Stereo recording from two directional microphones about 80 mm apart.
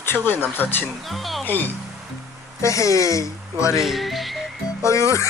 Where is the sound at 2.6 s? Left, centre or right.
Left.